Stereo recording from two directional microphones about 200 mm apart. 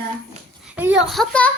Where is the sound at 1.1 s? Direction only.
5° left (ahead or behind).